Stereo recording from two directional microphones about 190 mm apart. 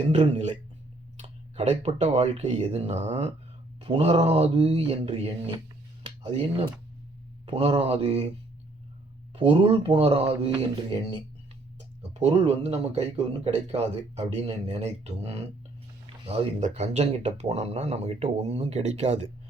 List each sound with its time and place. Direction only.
0.0 s speech: 35° right (ahead or behind)
7.4 s speech: 30° right (ahead or behind)
9.3 s speech: 30° right (ahead or behind)